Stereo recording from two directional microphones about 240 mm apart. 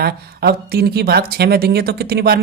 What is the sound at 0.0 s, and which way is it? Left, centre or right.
Speech, right.